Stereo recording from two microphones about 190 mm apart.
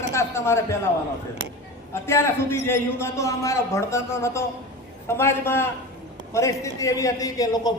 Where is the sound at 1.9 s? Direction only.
15° left (ahead or behind).